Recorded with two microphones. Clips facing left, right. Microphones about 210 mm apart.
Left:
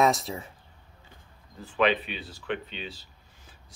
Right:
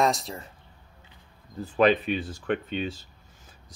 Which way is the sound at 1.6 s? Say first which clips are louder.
Right 4 dB; 40° right (ahead or behind).